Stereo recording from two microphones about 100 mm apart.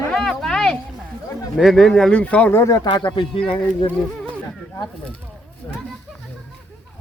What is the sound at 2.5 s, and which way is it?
Speech, 30° left (ahead or behind).